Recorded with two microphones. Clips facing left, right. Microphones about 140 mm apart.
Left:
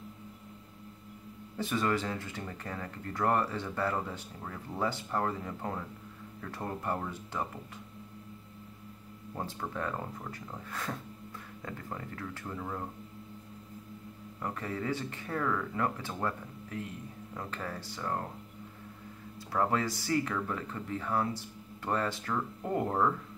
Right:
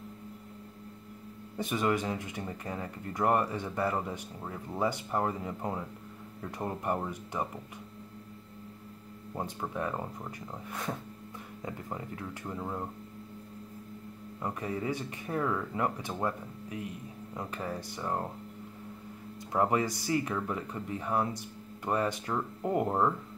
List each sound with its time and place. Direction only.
1.6 s speech: 15° right (ahead or behind)
9.4 s speech: 15° right (ahead or behind)
14.4 s speech: 15° right (ahead or behind)
19.5 s speech: 20° right (ahead or behind)